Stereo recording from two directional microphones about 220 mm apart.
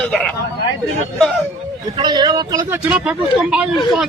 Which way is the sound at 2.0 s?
20° right (ahead or behind).